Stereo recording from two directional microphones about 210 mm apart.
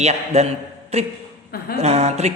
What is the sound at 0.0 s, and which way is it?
A man's voice, 30° right (ahead or behind).